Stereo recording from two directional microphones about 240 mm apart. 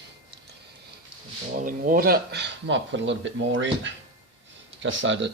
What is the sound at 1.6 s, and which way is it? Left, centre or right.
Speech, right.